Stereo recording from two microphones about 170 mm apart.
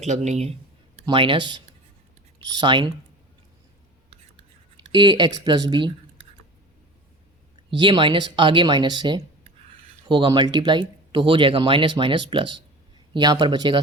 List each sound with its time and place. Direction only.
0.1 s speech: 40° right (ahead or behind)
1.0 s speech: 30° right (ahead or behind)
4.9 s speech: 25° right (ahead or behind)
7.7 s speech: 30° right (ahead or behind)